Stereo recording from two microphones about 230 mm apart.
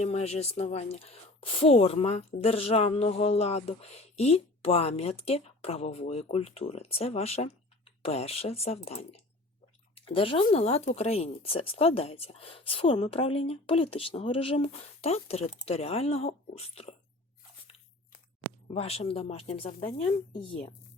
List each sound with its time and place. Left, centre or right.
0.0 s speech: left
18.7 s speech: left